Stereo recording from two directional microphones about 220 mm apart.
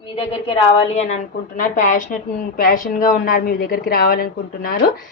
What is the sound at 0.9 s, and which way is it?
A woman's voice, 30° left (ahead or behind).